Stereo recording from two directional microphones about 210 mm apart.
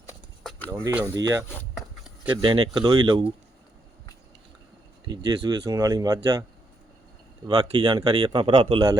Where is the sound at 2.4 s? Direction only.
20° right (ahead or behind).